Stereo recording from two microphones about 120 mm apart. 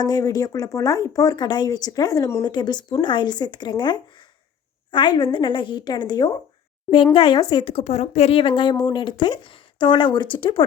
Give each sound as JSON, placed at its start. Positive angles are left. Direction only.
{"t": 0.0, "sound": "speech", "side_deg": 30}